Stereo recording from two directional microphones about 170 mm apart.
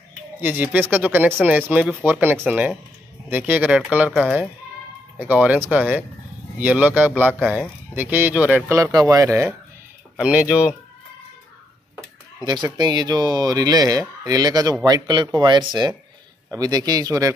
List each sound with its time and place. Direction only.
0.4 s speech: 10° right (ahead or behind)
7.3 s speech: centre (ahead or behind)
7.9 s speech: 10° right (ahead or behind)
12.7 s speech: 25° right (ahead or behind)